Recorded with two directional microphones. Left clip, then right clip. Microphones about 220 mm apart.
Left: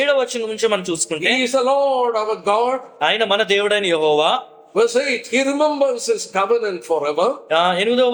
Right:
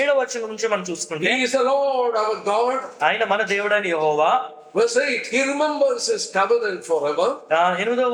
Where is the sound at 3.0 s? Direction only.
45° left (ahead or behind).